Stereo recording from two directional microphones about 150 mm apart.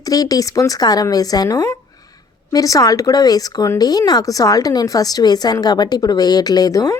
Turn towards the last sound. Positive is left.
turn(degrees=25)  # may be behind; listen again after turning